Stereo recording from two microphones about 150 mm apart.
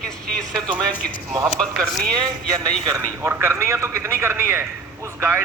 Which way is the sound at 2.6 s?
20° right (ahead or behind).